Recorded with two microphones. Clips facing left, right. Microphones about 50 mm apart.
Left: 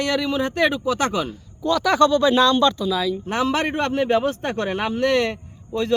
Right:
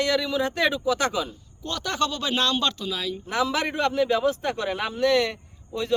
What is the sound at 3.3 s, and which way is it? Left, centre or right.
A man's voice, left.